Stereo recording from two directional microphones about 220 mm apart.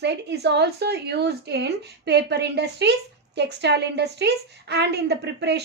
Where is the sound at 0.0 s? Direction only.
50° right (ahead or behind).